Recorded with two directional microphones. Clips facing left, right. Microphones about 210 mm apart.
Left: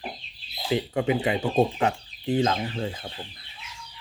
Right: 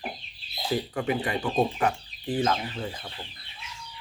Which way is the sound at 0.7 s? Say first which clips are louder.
Left 3 dB; 20° left (ahead or behind).